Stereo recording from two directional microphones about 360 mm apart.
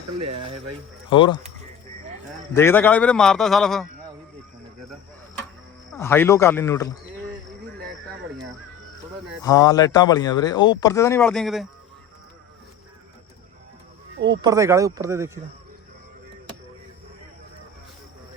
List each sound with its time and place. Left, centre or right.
0.2 s speech: centre
1.1 s speech: centre
2.6 s a man's voice: centre
5.9 s speech: centre
9.4 s speech: centre
14.3 s speech: centre